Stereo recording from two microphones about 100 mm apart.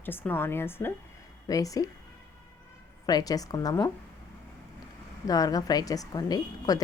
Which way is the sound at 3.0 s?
40° left (ahead or behind).